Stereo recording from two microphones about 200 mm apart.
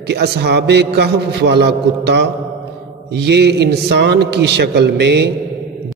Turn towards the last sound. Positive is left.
turn(degrees=-55)  # may be behind; listen again after turning